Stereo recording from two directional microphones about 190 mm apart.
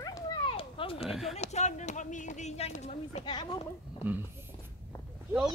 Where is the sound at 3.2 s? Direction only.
25° left (ahead or behind).